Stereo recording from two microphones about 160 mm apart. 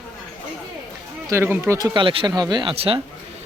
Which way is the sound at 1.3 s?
15° right (ahead or behind).